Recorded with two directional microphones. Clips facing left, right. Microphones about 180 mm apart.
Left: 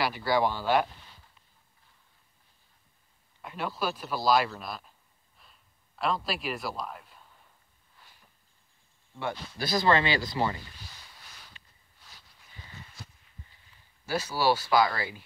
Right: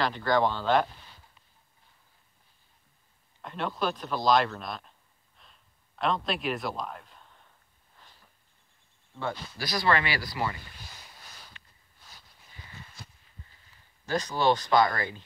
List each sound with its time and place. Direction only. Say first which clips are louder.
0.0 s speech: right 1 dB; 10° left (ahead or behind)
3.4 s speech: right 2 dB; 5° left (ahead or behind)
5.4 s a sound: right 1 dB; 5° left (ahead or behind)
9.6 s speech: left 3 dB; 25° left (ahead or behind)
14.0 s speech: right 1 dB; 10° left (ahead or behind)